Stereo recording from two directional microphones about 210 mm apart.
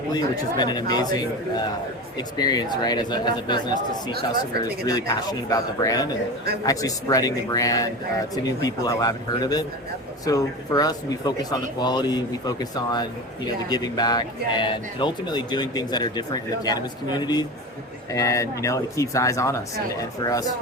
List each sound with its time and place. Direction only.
0.1 s a man's voice: 20° left (ahead or behind)
4.9 s a man's voice: 20° left (ahead or behind)